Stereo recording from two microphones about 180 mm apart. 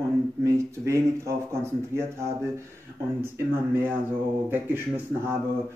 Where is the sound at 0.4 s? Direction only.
15° right (ahead or behind).